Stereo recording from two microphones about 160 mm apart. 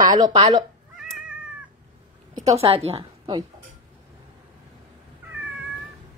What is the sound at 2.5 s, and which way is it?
Speech, 40° right (ahead or behind).